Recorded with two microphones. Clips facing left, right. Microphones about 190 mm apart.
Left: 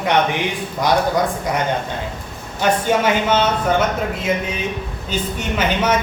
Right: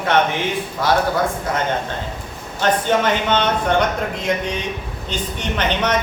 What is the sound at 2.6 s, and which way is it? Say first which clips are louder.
A woman's voice: left 1 dB; 10° left (ahead or behind).